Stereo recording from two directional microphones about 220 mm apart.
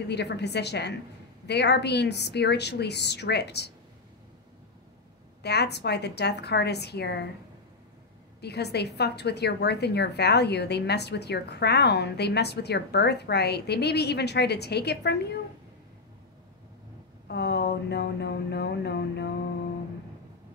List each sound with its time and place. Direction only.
0.1 s a woman's voice: 50° left (ahead or behind)
5.4 s a woman's voice: 50° left (ahead or behind)
8.4 s a woman's voice: 50° left (ahead or behind)
17.3 s a woman's voice: 50° left (ahead or behind)